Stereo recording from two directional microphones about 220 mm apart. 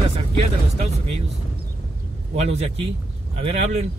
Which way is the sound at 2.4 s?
30° right (ahead or behind).